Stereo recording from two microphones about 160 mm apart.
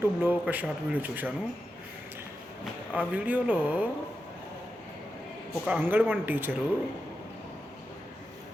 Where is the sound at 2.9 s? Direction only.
10° right (ahead or behind).